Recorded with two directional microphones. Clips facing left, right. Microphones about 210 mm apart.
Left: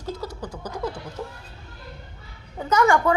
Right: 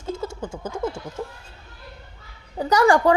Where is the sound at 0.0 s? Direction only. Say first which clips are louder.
Right 3 dB; 25° right (ahead or behind).